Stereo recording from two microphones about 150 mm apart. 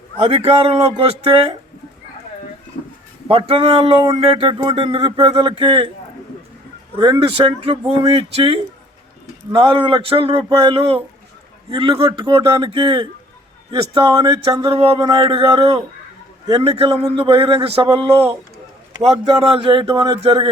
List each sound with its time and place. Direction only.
0.2 s a man's voice: 40° right (ahead or behind)
3.2 s a man's voice: 40° right (ahead or behind)
6.9 s a man's voice: 30° right (ahead or behind)
16.5 s a man's voice: 25° right (ahead or behind)
16.7 s a man's voice: 40° right (ahead or behind)